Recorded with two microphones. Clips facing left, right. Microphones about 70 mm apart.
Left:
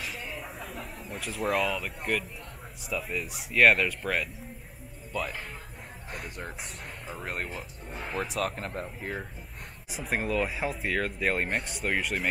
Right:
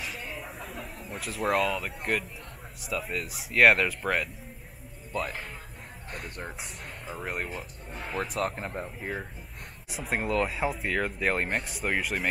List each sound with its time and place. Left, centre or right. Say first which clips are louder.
0.0 s a sound: even; centre
2.8 s speech: even; centre
8.5 s speech: right 1 dB; centre
8.8 s speech: right 1 dB; centre